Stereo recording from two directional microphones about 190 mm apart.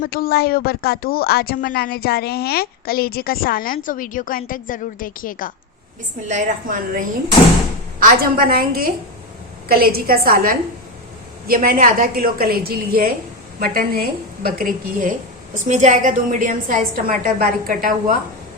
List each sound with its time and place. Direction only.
0.0 s a woman's voice: 50° left (ahead or behind)
6.2 s a woman's voice: 40° right (ahead or behind)